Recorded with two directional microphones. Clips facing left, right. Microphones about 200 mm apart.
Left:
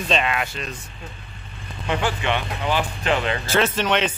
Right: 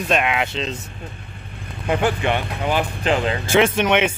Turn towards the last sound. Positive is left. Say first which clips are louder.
# right 4 dB
turn(degrees=-10)  # may be behind; listen again after turning